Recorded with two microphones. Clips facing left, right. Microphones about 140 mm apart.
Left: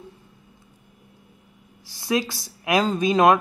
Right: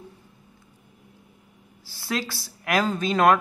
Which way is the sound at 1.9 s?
15° left (ahead or behind).